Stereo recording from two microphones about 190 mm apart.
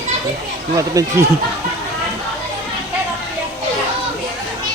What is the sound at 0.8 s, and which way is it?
Speech, 15° right (ahead or behind).